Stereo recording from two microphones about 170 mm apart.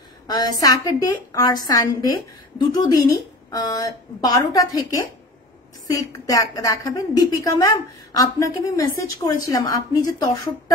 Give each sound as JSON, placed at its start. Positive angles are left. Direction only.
{"t": 0.3, "sound": "a woman's voice", "side_deg": 25}